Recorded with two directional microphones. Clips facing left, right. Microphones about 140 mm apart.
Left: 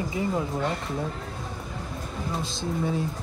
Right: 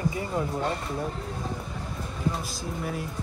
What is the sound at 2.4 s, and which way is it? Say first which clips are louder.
Speech: left 5 dB; 25° left (ahead or behind).